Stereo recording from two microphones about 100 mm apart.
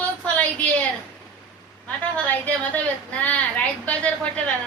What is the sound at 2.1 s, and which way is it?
A woman's voice, 15° left (ahead or behind).